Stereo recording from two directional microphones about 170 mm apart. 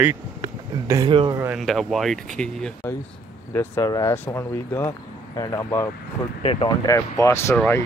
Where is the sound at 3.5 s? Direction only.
15° left (ahead or behind).